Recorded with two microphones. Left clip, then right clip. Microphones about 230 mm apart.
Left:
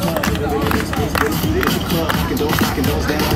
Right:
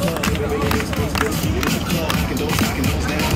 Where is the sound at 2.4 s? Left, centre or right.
Centre.